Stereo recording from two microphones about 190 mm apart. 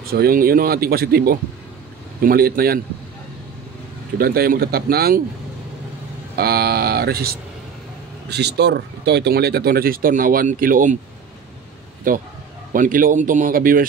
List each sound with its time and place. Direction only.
0.0 s speech: 55° right (ahead or behind)
4.2 s speech: 50° right (ahead or behind)
6.3 s speech: 55° right (ahead or behind)
12.1 s speech: 45° right (ahead or behind)